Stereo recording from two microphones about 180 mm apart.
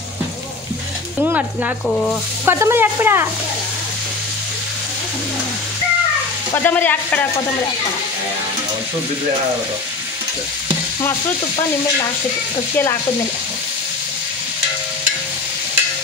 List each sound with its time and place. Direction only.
1.2 s speech: 10° right (ahead or behind)
1.9 s speech: centre (ahead or behind)
2.4 s speech: 15° right (ahead or behind)
6.5 s frying: 10° left (ahead or behind)
11.0 s stir: 20° left (ahead or behind)